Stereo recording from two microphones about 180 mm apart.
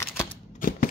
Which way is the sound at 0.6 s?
50° left (ahead or behind).